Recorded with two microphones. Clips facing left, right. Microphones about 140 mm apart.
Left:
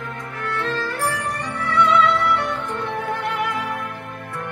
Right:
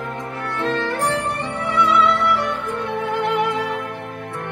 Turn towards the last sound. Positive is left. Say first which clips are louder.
# right 4 dB
turn(degrees=-25)  # may be behind; listen again after turning